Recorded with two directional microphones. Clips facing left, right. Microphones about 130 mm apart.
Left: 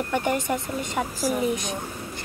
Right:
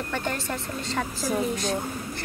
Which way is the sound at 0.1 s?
15° left (ahead or behind).